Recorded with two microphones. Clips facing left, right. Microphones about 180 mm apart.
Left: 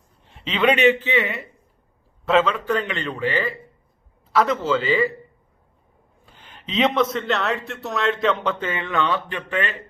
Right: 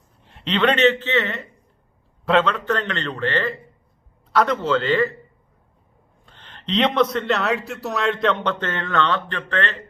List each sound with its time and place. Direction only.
0.2 s a man's voice: centre (ahead or behind)
6.2 s a man's voice: 5° left (ahead or behind)